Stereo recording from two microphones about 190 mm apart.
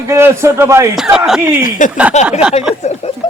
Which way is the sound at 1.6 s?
45° left (ahead or behind).